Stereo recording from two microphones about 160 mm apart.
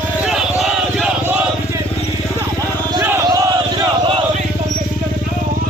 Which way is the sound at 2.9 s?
20° right (ahead or behind).